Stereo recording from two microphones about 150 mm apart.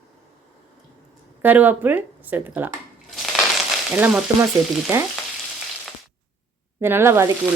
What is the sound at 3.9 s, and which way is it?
Speech, 10° right (ahead or behind).